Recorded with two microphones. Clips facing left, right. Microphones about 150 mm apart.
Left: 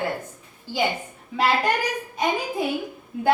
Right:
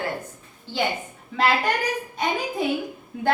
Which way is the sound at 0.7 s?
10° left (ahead or behind).